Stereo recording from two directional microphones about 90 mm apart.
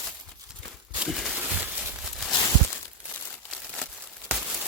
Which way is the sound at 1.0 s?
5° right (ahead or behind).